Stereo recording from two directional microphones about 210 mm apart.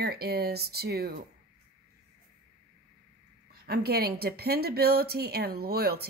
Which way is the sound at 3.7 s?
45° right (ahead or behind).